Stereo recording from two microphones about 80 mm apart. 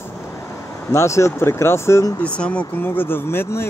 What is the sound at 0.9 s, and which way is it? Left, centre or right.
Speech, left.